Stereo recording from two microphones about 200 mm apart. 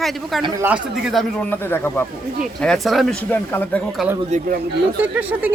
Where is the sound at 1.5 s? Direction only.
10° left (ahead or behind).